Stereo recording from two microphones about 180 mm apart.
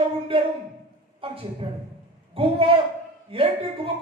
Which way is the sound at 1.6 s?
25° right (ahead or behind).